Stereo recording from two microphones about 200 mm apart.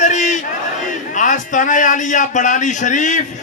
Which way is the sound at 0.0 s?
35° left (ahead or behind).